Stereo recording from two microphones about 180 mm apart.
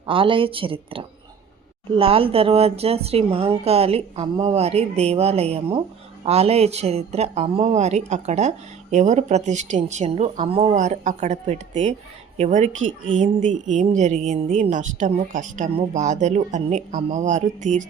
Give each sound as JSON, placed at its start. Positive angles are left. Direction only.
{"t": 0.0, "sound": "a woman's voice", "side_deg": -30}